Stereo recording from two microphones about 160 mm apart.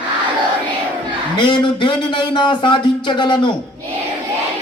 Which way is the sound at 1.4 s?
30° left (ahead or behind).